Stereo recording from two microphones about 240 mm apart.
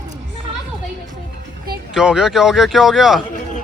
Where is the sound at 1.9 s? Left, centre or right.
Centre.